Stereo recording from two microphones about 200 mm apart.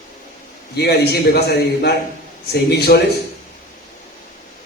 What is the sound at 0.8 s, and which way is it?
A man's voice, 55° left (ahead or behind).